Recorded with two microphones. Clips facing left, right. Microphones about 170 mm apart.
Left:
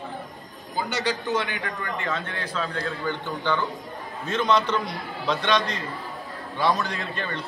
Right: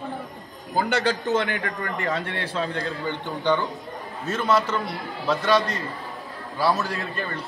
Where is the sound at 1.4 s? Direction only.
45° right (ahead or behind).